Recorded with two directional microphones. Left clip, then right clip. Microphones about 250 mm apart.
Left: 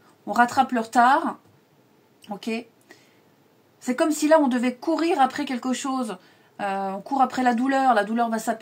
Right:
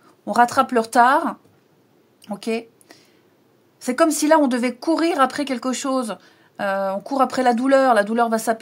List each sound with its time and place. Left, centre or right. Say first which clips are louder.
0.2 s speech: right 3 dB; right
2.2 s a sound: right 5 dB; right
3.8 s speech: right 5 dB; right